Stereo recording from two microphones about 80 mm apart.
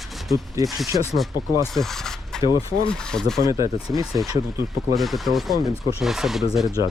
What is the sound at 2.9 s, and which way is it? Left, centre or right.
Speech, centre.